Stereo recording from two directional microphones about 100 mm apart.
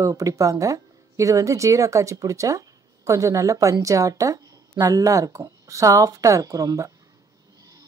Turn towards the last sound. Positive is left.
turn(degrees=-35)  # may be behind; listen again after turning